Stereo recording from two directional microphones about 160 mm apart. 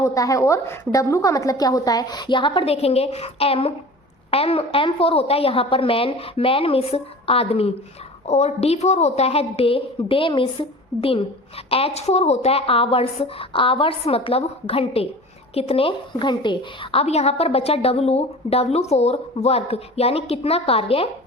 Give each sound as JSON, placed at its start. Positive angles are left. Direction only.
{"t": 0.0, "sound": "a woman's voice", "side_deg": 20}